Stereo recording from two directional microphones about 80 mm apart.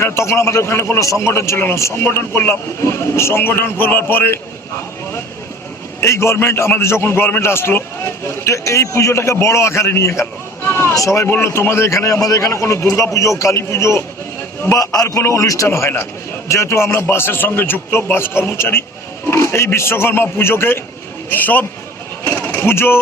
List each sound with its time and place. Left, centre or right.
0.0 s a man's voice: left
6.0 s a man's voice: left
10.7 s a sound: left
10.9 s a man's voice: left
14.8 s a man's voice: left
22.3 s pigeon: left